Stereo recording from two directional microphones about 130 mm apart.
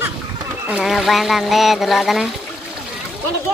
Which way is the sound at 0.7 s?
5° right (ahead or behind).